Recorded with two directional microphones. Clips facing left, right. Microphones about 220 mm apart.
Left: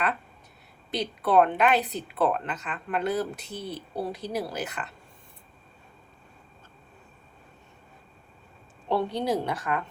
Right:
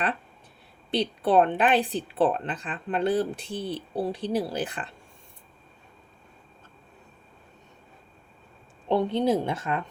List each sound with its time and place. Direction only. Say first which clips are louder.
0.9 s speech: right 3 dB; 30° right (ahead or behind)
8.9 s a woman's voice: right 3 dB; 20° right (ahead or behind)